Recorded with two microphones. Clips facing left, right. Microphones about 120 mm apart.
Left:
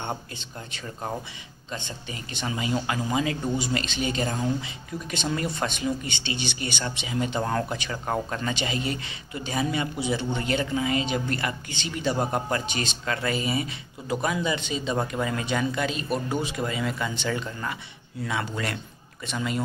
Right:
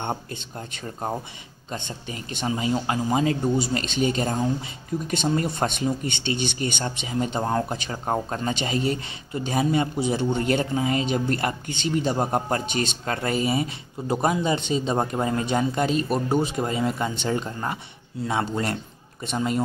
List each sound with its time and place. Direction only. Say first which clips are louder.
0.0 s speech: right 3 dB; 55° right (ahead or behind)
0.6 s speech: right 3 dB; 40° right (ahead or behind)